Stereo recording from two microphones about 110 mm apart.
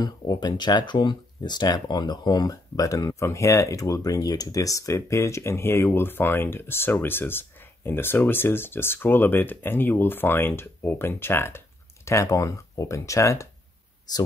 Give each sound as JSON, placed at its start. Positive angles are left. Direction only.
{"t": 0.0, "sound": "speech", "side_deg": 40}